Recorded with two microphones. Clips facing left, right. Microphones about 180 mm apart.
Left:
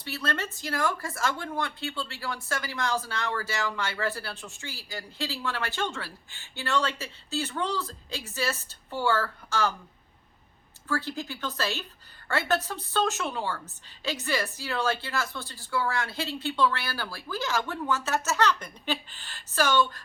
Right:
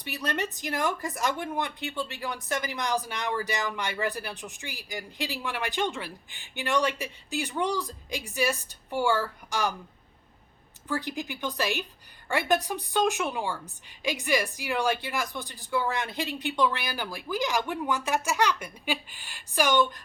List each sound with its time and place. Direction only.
0.0 s a woman's voice: 15° right (ahead or behind)
10.8 s a woman's voice: 15° right (ahead or behind)